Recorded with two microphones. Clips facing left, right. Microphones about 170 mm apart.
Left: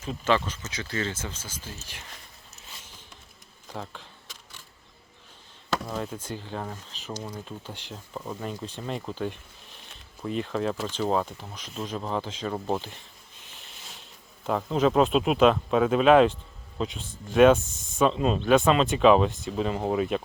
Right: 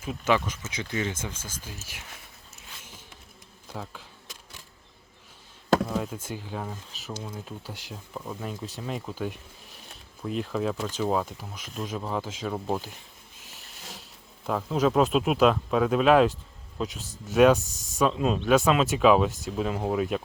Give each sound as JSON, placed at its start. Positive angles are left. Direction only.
{"t": 0.0, "sound": "speech", "side_deg": -10}
{"t": 1.4, "sound": "speech", "side_deg": 10}
{"t": 1.6, "sound": "speech", "side_deg": -10}
{"t": 3.7, "sound": "speech", "side_deg": -5}
{"t": 5.9, "sound": "speech", "side_deg": -5}
{"t": 13.4, "sound": "a sound", "side_deg": -5}
{"t": 14.4, "sound": "speech", "side_deg": 0}
{"t": 17.7, "sound": "speech", "side_deg": -40}
{"t": 17.9, "sound": "speech", "side_deg": 0}